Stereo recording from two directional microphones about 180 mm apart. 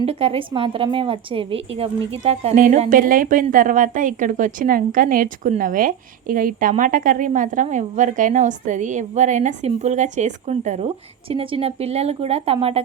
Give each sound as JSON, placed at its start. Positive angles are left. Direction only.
{"t": 0.0, "sound": "a woman's voice", "side_deg": -30}